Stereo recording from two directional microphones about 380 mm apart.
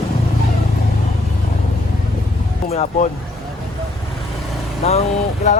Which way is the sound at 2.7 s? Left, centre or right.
Centre.